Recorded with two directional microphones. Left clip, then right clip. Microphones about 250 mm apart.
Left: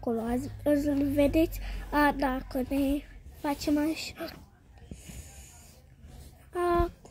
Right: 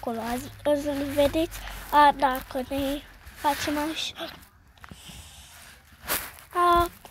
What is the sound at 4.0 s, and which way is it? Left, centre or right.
Speech, right.